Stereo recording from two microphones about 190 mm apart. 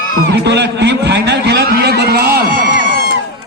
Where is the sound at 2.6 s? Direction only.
60° left (ahead or behind).